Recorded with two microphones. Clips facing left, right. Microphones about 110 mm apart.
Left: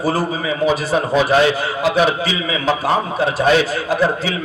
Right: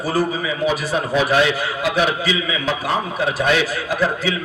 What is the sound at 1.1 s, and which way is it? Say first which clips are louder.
A man's voice: left 3 dB; 30° left (ahead or behind).